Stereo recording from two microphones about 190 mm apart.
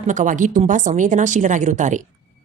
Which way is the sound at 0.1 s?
40° right (ahead or behind).